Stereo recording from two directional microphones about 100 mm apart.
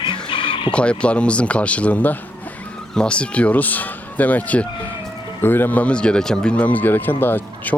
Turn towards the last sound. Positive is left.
turn(degrees=20)  # may be behind; listen again after turning